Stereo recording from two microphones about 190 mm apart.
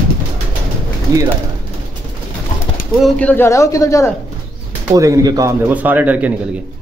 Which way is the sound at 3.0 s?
5° left (ahead or behind).